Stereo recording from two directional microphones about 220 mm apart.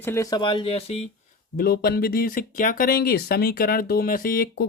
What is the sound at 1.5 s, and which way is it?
Speech, 45° left (ahead or behind).